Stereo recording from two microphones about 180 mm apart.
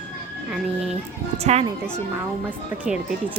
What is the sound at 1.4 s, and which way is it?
Speech, 35° right (ahead or behind).